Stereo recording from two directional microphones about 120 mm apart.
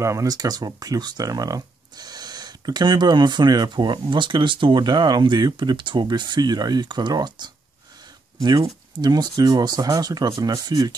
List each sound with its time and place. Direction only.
0.0 s speech: 25° right (ahead or behind)